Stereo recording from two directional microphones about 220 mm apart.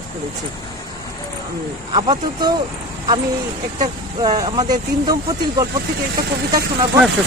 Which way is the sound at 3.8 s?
20° right (ahead or behind).